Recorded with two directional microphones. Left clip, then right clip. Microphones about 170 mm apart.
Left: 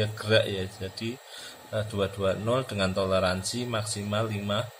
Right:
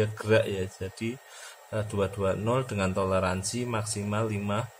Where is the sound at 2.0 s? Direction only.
20° right (ahead or behind).